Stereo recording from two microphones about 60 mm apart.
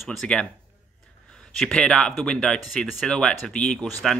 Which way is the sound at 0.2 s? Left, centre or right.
Centre.